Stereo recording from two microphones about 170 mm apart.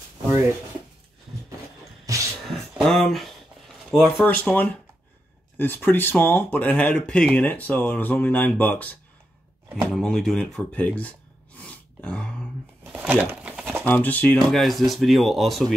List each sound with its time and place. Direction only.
2.1 s music: 20° right (ahead or behind)
2.4 s a sound: centre (ahead or behind)
3.9 s speech: 5° left (ahead or behind)
9.9 s speech: centre (ahead or behind)
11.6 s throat clearing: 5° left (ahead or behind)
12.8 s crumpling: 10° right (ahead or behind)
13.8 s speech: 10° left (ahead or behind)